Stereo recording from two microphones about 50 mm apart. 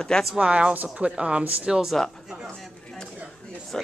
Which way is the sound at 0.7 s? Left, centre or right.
Right.